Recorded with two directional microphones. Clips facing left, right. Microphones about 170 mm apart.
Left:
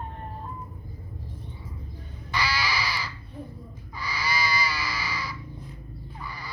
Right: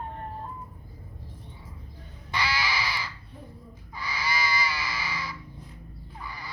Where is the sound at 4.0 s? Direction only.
25° right (ahead or behind).